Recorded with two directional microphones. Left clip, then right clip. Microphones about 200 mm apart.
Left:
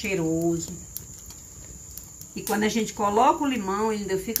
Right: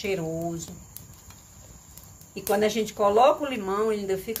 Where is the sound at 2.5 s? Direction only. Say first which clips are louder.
Right 2 dB; 60° right (ahead or behind).